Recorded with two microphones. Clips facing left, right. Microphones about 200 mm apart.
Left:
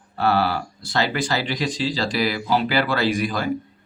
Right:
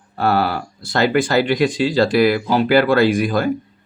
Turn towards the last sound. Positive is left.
turn(degrees=-50)  # may be behind; listen again after turning